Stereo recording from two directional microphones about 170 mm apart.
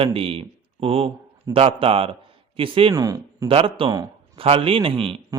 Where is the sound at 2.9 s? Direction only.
20° right (ahead or behind).